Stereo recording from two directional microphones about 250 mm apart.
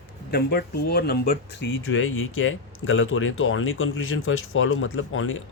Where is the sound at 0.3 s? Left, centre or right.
Left.